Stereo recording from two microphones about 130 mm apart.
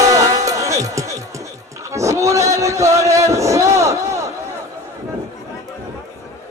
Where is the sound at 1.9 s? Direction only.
25° right (ahead or behind).